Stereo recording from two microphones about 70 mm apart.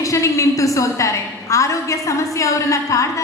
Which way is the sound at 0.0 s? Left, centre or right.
Left.